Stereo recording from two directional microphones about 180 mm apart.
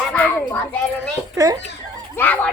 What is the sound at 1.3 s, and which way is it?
Speech, 20° right (ahead or behind).